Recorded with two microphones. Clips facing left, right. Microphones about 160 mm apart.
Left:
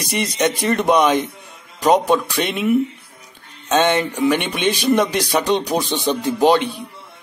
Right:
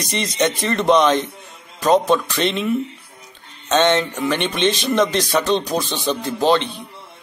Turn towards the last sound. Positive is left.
turn(degrees=15)  # may be behind; listen again after turning